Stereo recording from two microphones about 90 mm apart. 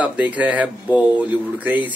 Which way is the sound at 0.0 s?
15° right (ahead or behind).